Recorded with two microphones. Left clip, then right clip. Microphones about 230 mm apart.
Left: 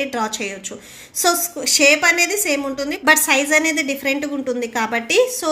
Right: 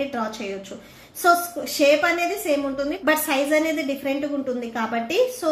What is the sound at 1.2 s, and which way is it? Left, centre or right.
A woman's voice, left.